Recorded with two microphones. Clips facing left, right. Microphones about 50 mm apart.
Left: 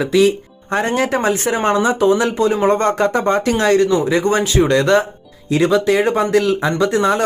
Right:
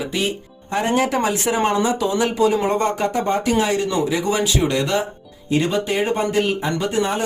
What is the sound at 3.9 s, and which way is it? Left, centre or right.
Speech, left.